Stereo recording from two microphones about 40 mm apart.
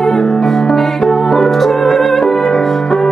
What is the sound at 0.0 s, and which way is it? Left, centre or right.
Music, centre.